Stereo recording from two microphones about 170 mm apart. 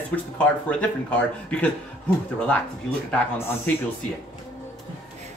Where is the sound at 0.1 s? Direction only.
10° left (ahead or behind).